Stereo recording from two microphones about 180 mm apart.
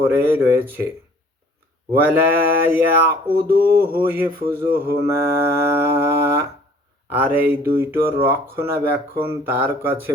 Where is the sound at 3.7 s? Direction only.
55° right (ahead or behind).